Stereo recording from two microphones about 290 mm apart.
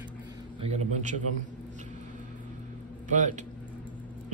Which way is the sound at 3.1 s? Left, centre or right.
Right.